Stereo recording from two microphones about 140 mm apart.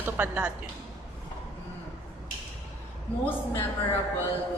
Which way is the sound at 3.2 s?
15° left (ahead or behind).